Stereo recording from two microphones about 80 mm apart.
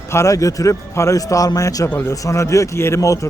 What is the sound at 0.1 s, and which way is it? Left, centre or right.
A man's voice, left.